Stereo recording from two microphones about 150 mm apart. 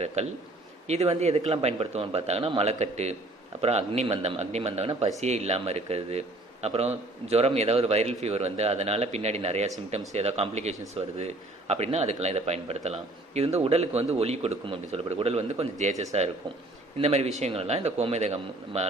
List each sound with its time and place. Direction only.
0.2 s a man's voice: 50° right (ahead or behind)